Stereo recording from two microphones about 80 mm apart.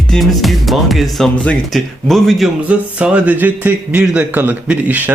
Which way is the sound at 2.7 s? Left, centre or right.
Centre.